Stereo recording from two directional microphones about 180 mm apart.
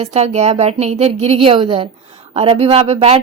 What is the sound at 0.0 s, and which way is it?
A woman's voice, 40° right (ahead or behind).